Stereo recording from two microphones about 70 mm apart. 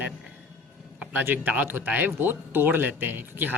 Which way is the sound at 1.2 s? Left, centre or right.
Right.